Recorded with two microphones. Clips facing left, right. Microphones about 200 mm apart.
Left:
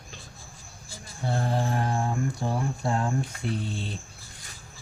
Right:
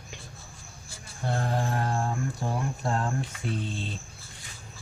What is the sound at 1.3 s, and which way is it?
Mantra, 10° left (ahead or behind).